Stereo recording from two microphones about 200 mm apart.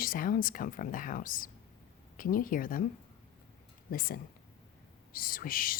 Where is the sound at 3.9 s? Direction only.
45° left (ahead or behind).